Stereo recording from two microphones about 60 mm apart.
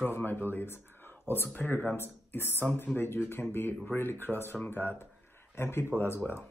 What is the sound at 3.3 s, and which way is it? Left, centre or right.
Speech, left.